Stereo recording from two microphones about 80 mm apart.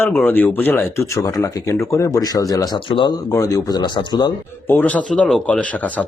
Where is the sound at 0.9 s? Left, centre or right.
Left.